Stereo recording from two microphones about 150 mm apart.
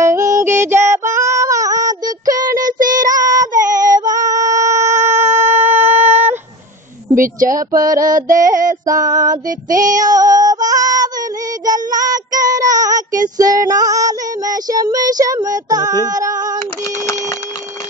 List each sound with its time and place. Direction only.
0.0 s female singing: 20° right (ahead or behind)
2.6 s child singing: 65° right (ahead or behind)
3.5 s female singing: 60° right (ahead or behind)
4.0 s music: 25° right (ahead or behind)
6.0 s a sound: 50° right (ahead or behind)
7.2 s speech: 65° right (ahead or behind)
8.3 s child singing: 65° right (ahead or behind)
9.0 s music: 25° right (ahead or behind)
9.5 s child singing: 65° right (ahead or behind)
10.0 s female singing: 25° right (ahead or behind)
12.3 s child singing: 25° right (ahead or behind)
15.7 s female singing: 25° right (ahead or behind)
16.8 s a sound: 20° left (ahead or behind)